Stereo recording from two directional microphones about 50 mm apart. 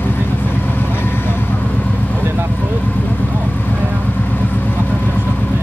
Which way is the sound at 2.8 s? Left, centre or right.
Left.